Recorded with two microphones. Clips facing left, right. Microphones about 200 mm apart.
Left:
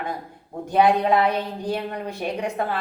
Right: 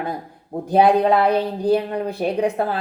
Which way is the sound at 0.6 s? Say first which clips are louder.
Right 3 dB; 35° right (ahead or behind).